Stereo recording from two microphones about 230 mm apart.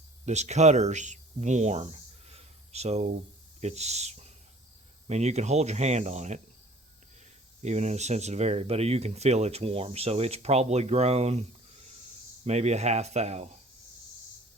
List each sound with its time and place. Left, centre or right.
0.3 s speech: right
7.6 s speech: right
12.5 s speech: right